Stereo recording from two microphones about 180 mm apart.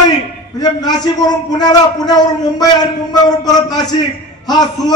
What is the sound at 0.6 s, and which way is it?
A man's voice, 20° left (ahead or behind).